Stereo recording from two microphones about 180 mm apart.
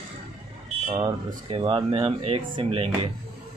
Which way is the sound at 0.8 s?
30° right (ahead or behind).